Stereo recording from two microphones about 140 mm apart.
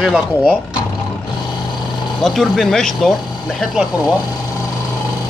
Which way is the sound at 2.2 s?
Centre (ahead or behind).